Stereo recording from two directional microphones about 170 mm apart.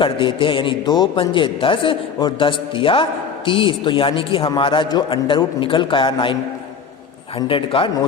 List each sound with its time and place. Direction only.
0.0 s a man's voice: 30° left (ahead or behind)
7.3 s a man's voice: 30° left (ahead or behind)